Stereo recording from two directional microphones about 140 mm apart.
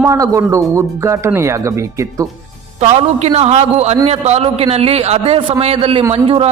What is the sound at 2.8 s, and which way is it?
A man's voice, 50° right (ahead or behind).